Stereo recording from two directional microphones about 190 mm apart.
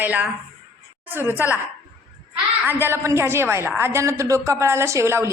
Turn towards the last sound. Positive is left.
turn(degrees=-15)  # may be behind; listen again after turning